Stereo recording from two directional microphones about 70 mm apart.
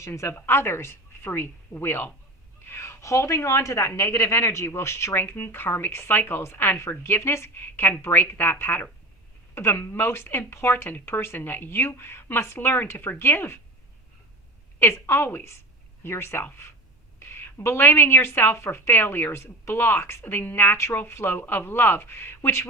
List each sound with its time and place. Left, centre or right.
0.0 s a woman's voice: left
14.8 s a woman's voice: left